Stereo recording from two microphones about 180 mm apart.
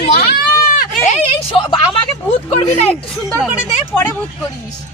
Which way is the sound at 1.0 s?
40° left (ahead or behind).